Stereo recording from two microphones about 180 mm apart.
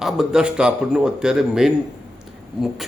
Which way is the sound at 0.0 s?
5° right (ahead or behind).